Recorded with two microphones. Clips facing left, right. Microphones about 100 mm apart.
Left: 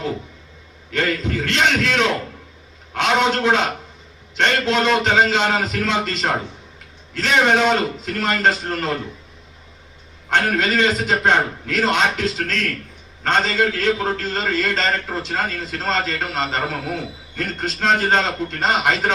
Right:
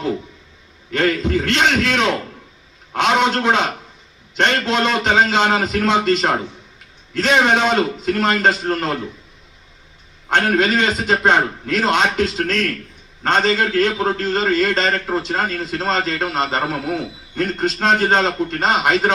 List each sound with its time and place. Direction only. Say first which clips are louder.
0.9 s a man's voice: right 4 dB; 15° right (ahead or behind)
2.9 s a man's voice: right 2 dB; 15° right (ahead or behind)
10.2 s a man's voice: right 3 dB; 15° right (ahead or behind)
13.2 s a man's voice: right 2 dB; 15° right (ahead or behind)
14.8 s a man's voice: right 3 dB; 5° right (ahead or behind)